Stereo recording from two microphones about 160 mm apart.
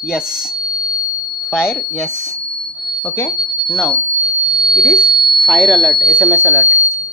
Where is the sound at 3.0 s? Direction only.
15° left (ahead or behind).